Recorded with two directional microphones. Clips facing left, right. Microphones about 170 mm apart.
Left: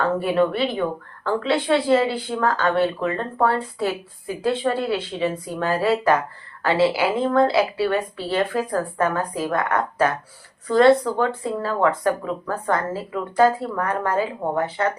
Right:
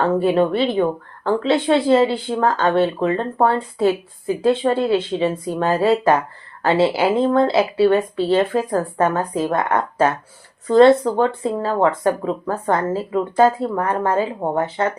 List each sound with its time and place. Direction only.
0.0 s speech: 25° right (ahead or behind)